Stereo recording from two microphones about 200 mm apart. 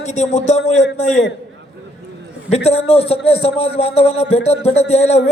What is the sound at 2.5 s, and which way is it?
A man's voice, 30° left (ahead or behind).